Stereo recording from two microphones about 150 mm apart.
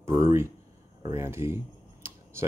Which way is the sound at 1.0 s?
20° right (ahead or behind).